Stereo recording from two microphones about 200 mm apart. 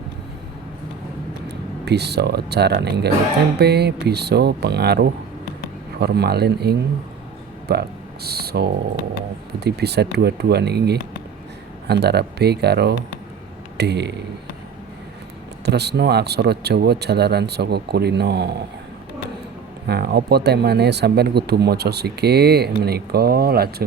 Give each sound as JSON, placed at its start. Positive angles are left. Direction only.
{"t": 1.8, "sound": "speech", "side_deg": -55}
{"t": 15.6, "sound": "speech", "side_deg": -55}
{"t": 19.9, "sound": "speech", "side_deg": -55}